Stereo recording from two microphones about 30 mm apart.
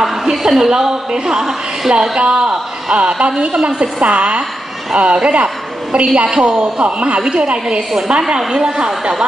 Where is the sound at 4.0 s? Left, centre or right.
Right.